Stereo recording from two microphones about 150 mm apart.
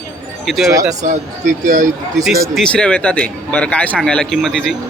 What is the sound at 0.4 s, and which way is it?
Speech, centre (ahead or behind).